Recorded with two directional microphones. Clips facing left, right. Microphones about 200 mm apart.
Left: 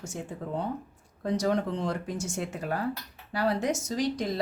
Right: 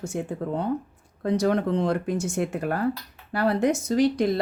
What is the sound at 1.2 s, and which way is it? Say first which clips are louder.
Speech: right 4 dB; 60° right (ahead or behind).